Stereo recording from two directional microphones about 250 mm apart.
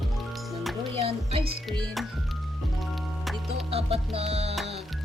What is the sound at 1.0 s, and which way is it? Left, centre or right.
Music, right.